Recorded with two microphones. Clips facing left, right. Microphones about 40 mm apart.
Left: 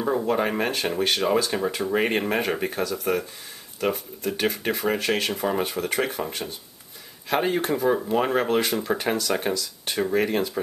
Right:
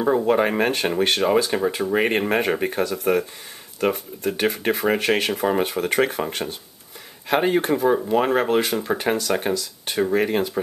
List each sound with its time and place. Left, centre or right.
0.0 s speech: centre
7.2 s speech: centre